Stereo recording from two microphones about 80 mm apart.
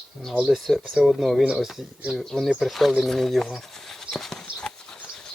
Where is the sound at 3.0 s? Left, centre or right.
Centre.